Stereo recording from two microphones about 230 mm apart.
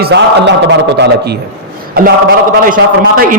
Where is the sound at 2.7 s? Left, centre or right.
Right.